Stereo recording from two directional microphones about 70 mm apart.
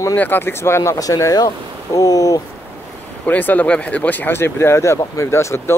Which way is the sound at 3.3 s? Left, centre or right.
Left.